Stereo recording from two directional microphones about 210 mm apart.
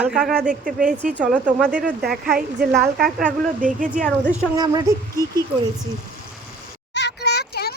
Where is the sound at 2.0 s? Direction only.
45° right (ahead or behind).